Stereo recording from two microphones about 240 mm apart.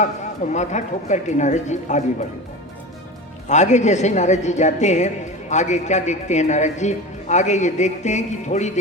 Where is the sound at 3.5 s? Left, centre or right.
Left.